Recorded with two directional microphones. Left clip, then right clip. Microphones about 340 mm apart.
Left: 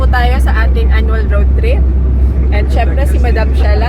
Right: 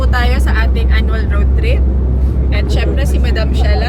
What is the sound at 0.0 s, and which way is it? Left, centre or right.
Vehicle, centre.